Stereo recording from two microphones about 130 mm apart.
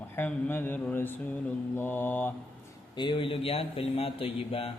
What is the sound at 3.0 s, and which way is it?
Speech, 40° left (ahead or behind).